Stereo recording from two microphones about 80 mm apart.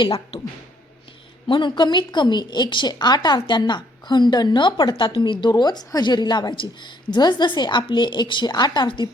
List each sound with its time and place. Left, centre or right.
1.5 s a woman's voice: left